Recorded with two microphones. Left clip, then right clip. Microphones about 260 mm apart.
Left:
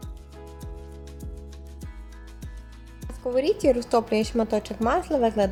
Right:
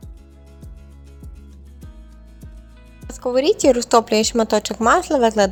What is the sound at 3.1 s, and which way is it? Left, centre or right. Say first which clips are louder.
A woman's voice: right 6 dB; centre.